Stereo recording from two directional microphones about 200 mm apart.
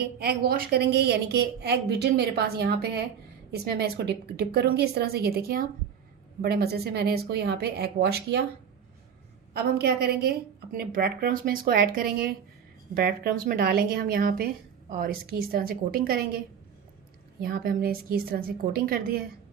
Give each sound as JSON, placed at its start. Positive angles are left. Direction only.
{"t": 0.0, "sound": "a woman's voice", "side_deg": -50}
{"t": 9.5, "sound": "a woman's voice", "side_deg": -55}
{"t": 17.4, "sound": "a woman's voice", "side_deg": -45}